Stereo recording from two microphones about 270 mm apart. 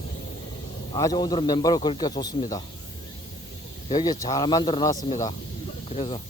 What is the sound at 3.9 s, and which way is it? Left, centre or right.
A man's voice, centre.